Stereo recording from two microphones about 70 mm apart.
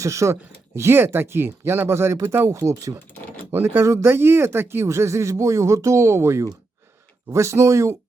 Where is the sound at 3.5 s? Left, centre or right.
Right.